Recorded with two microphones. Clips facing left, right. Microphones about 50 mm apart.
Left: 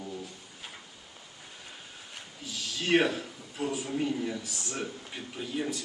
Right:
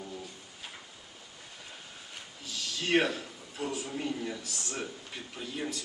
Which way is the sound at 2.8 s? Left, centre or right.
Centre.